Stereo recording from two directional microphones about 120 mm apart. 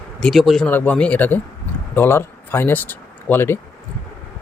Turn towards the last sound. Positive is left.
turn(degrees=20)  # may be behind; listen again after turning